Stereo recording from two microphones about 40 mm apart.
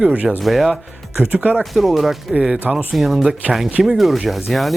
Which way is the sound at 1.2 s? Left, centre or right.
Right.